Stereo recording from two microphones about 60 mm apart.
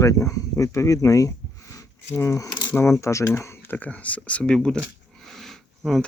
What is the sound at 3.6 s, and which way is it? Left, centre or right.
Speech, left.